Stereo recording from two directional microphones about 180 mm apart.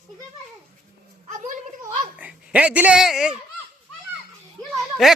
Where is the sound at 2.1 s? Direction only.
5° right (ahead or behind).